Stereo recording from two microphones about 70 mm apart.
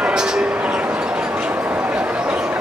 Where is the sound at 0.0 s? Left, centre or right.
Centre.